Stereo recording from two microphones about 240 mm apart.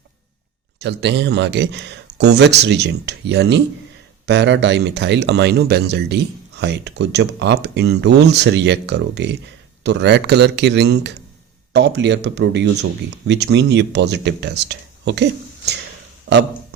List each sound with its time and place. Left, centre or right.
0.8 s speech: right